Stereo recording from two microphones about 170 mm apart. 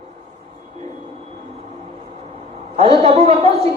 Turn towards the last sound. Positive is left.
turn(degrees=-35)  # may be behind; listen again after turning